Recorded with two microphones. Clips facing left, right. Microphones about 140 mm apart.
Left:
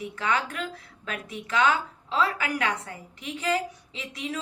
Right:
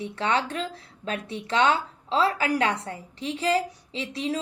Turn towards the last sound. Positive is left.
turn(degrees=-30)  # may be behind; listen again after turning